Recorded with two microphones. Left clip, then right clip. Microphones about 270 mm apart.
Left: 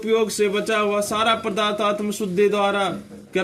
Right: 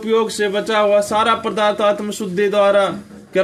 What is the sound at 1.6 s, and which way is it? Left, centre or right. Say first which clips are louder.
Speech: right 5 dB; left.